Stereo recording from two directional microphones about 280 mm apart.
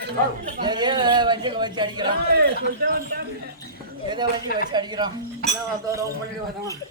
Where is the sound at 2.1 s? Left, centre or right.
Right.